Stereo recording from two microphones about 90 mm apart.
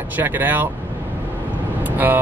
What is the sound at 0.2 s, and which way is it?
Speech, 20° right (ahead or behind).